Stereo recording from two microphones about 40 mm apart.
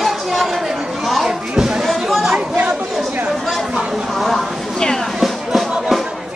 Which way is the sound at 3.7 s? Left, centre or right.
Centre.